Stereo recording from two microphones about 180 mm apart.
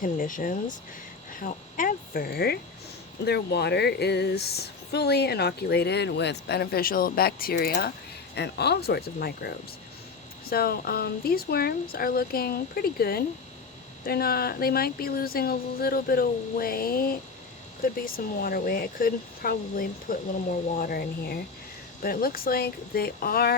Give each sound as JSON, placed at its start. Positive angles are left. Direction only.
{"t": 0.0, "sound": "speech", "side_deg": 45}